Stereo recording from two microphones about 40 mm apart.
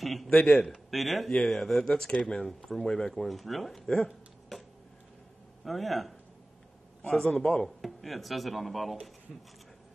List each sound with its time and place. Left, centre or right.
0.0 s speech: centre
0.3 s a man's voice: left
0.8 s speech: centre
2.1 s speech: left
2.7 s speech: centre
5.6 s speech: centre
7.2 s speech: centre
7.6 s speech: centre